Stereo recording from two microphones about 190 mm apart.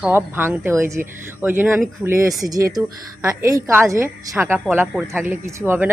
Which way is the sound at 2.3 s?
Centre (ahead or behind).